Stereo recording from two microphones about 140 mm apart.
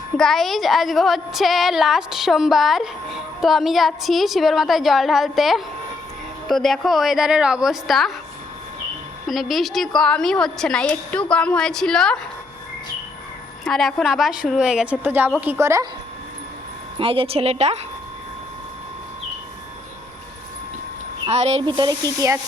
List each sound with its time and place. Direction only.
0.2 s a woman's voice: centre (ahead or behind)
9.2 s a woman's voice: centre (ahead or behind)
13.7 s a woman's voice: centre (ahead or behind); by 15.9 s 20° right (ahead or behind)
17.0 s a woman's voice: 40° right (ahead or behind)
21.2 s a woman's voice: 50° right (ahead or behind)
21.7 s speech: 30° right (ahead or behind)